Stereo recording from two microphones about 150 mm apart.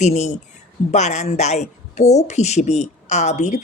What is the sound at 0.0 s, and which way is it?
Speech, 50° left (ahead or behind).